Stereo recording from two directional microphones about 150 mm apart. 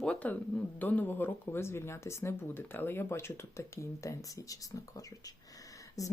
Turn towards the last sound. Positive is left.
turn(degrees=20)  # may be behind; listen again after turning